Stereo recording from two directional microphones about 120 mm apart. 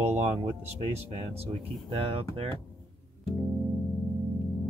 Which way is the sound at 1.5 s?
50° right (ahead or behind).